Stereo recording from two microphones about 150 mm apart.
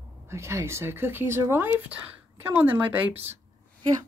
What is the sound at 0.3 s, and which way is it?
Speech, 20° right (ahead or behind).